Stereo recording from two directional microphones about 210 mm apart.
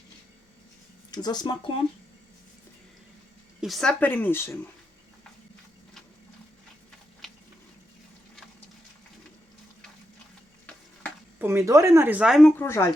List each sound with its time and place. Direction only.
1.1 s speech: 20° left (ahead or behind)
3.6 s a woman's voice: centre (ahead or behind)
11.3 s a woman's voice: 10° right (ahead or behind); by 12.9 s 10° left (ahead or behind)